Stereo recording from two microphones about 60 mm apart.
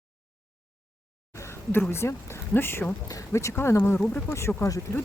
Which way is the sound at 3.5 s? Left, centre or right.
Left.